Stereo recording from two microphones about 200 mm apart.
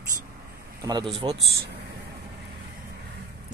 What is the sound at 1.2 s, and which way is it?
Speech, 25° right (ahead or behind).